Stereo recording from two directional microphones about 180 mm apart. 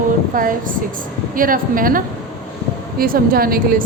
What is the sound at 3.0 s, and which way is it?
Speech, 55° right (ahead or behind).